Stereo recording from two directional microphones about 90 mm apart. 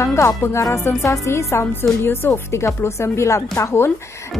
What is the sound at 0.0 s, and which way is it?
Speech, 35° left (ahead or behind).